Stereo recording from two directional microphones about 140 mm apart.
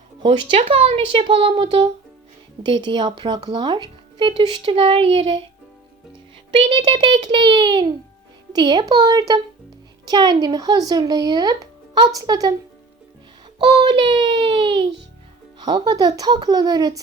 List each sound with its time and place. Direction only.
0.2 s speech: 40° right (ahead or behind)
6.5 s speech: 35° right (ahead or behind)
13.6 s speech: 35° right (ahead or behind)